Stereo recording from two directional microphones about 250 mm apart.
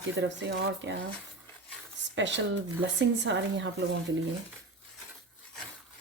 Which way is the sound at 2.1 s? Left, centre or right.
Right.